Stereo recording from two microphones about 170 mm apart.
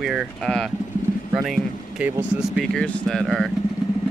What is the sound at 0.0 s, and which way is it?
Speech, centre (ahead or behind).